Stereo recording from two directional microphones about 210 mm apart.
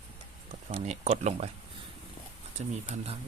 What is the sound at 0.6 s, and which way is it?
Speech, 30° right (ahead or behind).